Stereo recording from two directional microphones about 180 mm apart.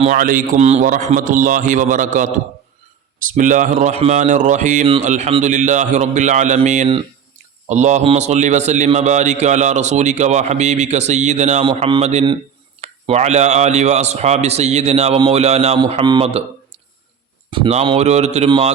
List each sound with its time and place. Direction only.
0.0 s a man's voice: 45° right (ahead or behind)
11.6 s a man's voice: 25° right (ahead or behind)
17.5 s a man's voice: 30° right (ahead or behind)